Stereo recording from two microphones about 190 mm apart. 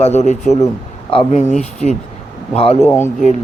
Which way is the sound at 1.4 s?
5° left (ahead or behind).